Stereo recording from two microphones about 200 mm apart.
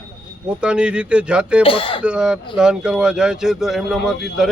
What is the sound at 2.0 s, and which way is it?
Speech, 5° right (ahead or behind).